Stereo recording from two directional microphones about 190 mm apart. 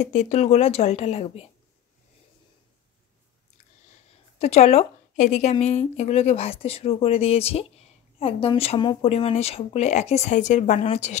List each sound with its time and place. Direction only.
0.0 s a woman's voice: 40° left (ahead or behind)
4.4 s a woman's voice: 35° left (ahead or behind)